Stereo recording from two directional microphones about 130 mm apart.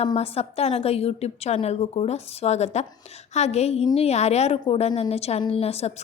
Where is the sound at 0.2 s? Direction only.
50° left (ahead or behind).